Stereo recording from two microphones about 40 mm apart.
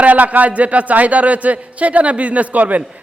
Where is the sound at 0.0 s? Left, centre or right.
Right.